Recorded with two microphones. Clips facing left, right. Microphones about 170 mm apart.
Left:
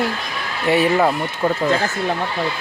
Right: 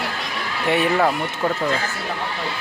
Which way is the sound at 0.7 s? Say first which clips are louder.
Left 3 dB; 5° left (ahead or behind).